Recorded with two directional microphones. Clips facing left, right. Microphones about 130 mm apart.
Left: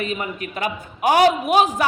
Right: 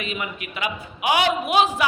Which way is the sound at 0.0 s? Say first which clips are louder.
Left 4 dB; 40° left (ahead or behind).